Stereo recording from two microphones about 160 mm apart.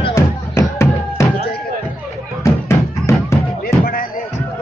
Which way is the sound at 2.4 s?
15° left (ahead or behind).